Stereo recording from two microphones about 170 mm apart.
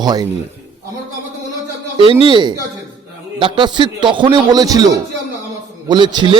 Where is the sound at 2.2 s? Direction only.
30° right (ahead or behind).